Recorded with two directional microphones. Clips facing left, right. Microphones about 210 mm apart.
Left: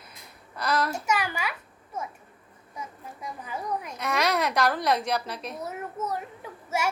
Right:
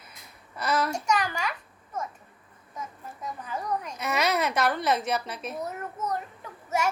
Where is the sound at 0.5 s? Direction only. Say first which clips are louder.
Even; 5° right (ahead or behind).